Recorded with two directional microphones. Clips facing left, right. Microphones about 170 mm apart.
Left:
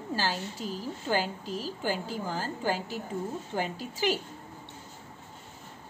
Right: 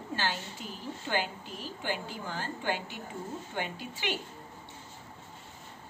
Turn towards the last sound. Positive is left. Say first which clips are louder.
# left 6 dB
turn(degrees=40)  # may be behind; listen again after turning